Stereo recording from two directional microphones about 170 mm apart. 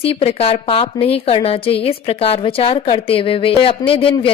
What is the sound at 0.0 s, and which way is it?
A woman's voice, 35° left (ahead or behind).